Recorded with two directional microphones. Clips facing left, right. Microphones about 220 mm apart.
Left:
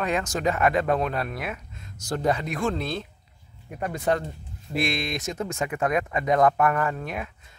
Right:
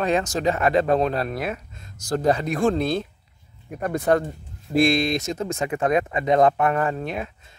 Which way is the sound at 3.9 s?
50° right (ahead or behind).